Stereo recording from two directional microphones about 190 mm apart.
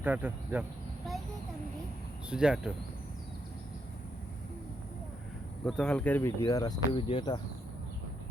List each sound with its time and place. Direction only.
0.0 s cricket: 10° right (ahead or behind)
2.3 s speech: 5° right (ahead or behind)
5.6 s speech: 5° left (ahead or behind)
6.4 s speech: 20° left (ahead or behind)